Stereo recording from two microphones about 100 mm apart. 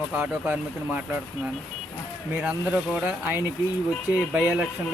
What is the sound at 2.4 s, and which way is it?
Speech, 10° right (ahead or behind).